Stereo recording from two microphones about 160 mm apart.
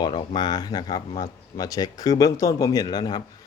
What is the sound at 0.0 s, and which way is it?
Speech, 30° left (ahead or behind).